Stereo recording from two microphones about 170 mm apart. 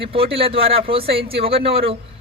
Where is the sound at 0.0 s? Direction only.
35° right (ahead or behind).